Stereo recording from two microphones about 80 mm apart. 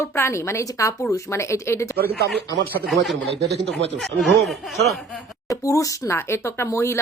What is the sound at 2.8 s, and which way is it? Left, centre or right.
Speech, centre.